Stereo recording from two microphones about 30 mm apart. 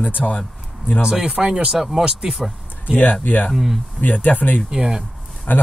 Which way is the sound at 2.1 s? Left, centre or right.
Right.